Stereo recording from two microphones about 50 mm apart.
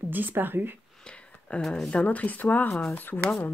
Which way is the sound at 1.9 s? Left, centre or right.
Left.